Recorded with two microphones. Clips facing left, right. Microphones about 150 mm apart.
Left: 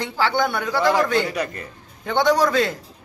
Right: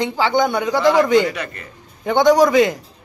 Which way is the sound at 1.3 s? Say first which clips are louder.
Even; 35° left (ahead or behind).